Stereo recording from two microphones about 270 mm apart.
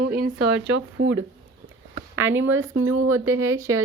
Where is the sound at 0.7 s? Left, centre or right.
Right.